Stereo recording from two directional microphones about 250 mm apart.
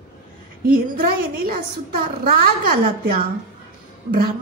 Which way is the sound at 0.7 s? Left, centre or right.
Right.